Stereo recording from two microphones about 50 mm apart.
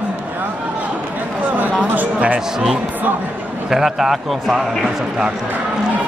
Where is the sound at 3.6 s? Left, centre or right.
Centre.